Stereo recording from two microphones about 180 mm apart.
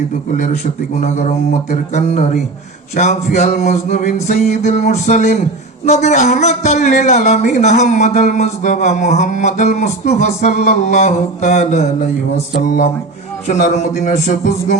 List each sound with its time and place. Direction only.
0.9 s a man's voice: 40° left (ahead or behind)
12.6 s mantra: 50° left (ahead or behind)
13.5 s a man's voice: 45° left (ahead or behind)